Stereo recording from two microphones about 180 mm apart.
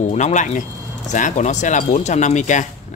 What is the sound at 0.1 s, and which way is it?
Speech, 40° left (ahead or behind).